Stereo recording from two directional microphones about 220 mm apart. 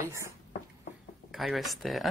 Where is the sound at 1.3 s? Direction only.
Centre (ahead or behind).